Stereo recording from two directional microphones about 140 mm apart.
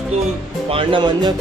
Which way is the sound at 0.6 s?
40° right (ahead or behind).